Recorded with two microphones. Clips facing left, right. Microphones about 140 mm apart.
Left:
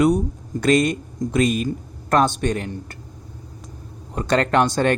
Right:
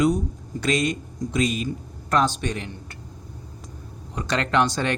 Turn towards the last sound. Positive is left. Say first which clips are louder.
# left 4 dB
turn(degrees=50)  # may be behind; listen again after turning